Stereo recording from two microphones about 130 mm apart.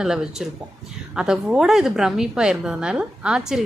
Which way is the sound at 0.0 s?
5° right (ahead or behind).